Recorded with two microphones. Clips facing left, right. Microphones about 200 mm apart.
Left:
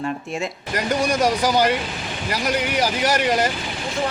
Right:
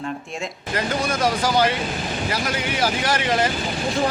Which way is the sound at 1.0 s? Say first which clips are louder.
Left 3 dB; 15° left (ahead or behind).